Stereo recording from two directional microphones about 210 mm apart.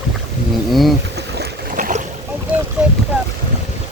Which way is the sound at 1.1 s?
45° right (ahead or behind).